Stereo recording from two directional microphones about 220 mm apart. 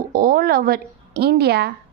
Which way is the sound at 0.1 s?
40° right (ahead or behind).